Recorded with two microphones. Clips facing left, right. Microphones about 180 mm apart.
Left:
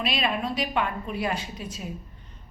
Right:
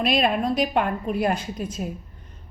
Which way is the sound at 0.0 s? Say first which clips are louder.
Right 6 dB; 50° right (ahead or behind).